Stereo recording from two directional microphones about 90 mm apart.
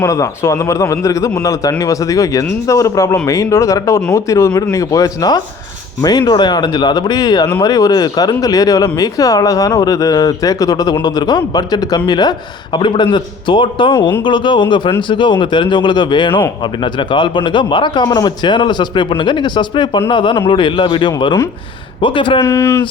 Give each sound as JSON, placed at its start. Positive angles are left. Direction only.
{"t": 0.0, "sound": "a man's voice", "side_deg": 35}
{"t": 22.4, "sound": "speech", "side_deg": 30}